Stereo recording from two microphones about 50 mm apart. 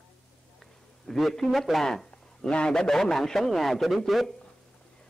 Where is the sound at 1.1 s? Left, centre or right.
Centre.